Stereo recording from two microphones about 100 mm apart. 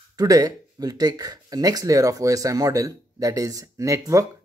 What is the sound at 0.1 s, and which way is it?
Speech, 40° right (ahead or behind).